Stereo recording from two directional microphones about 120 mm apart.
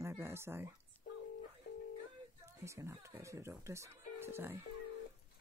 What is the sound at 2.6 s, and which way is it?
Speech, 25° right (ahead or behind).